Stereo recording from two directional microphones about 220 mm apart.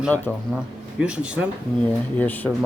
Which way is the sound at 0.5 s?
5° right (ahead or behind).